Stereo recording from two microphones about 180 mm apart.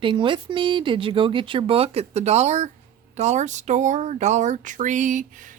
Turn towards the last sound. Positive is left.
turn(degrees=-45)  # may be behind; listen again after turning